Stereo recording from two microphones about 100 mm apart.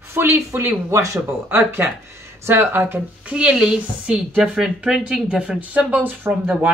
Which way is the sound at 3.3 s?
5° right (ahead or behind).